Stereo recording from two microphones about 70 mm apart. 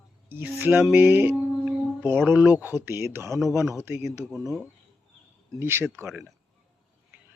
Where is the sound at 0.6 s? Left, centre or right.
Right.